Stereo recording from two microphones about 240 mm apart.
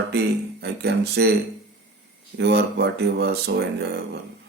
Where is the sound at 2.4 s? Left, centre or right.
Right.